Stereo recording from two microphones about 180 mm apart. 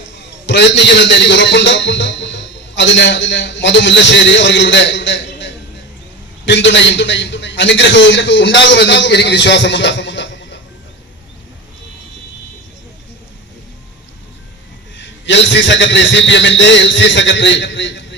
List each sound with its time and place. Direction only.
0.4 s a man's voice: 75° left (ahead or behind)
14.9 s a man's voice: 85° left